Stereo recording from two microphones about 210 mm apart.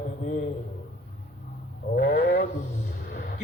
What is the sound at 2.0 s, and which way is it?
Speech, 50° left (ahead or behind).